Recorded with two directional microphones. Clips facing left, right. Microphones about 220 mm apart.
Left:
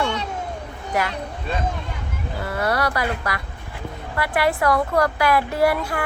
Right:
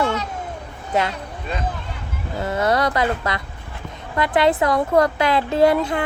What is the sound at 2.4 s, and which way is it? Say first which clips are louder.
A woman's voice: right 3 dB; 20° right (ahead or behind).